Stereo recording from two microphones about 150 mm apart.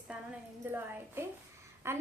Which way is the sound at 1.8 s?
15° right (ahead or behind).